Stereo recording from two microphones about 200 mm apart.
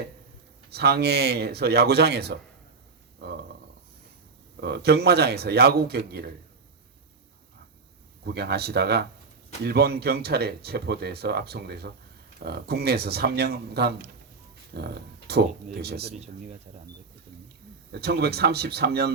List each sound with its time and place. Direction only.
0.7 s speech: 55° right (ahead or behind)
4.6 s speech: 55° right (ahead or behind)
8.2 s speech: 55° right (ahead or behind)
17.9 s speech: 55° right (ahead or behind)